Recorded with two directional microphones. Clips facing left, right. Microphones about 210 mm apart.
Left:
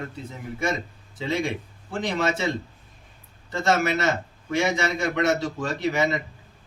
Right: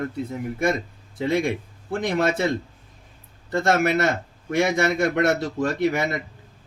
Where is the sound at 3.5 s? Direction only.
55° right (ahead or behind).